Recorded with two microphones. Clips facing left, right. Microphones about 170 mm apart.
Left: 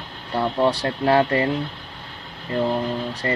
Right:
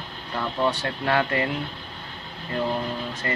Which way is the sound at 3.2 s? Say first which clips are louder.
Left 5 dB; 30° left (ahead or behind).